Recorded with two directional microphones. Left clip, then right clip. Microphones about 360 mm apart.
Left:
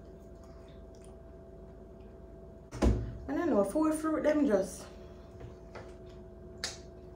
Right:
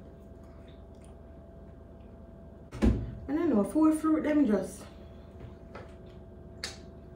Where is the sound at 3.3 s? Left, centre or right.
Centre.